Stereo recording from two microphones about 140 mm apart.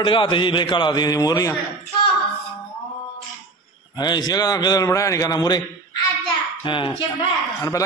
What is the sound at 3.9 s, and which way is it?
A man's voice, 30° left (ahead or behind).